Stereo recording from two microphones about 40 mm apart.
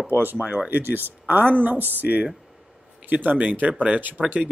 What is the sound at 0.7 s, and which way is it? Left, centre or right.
Speech, right.